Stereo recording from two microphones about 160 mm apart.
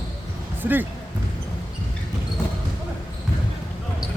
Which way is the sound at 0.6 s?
10° right (ahead or behind).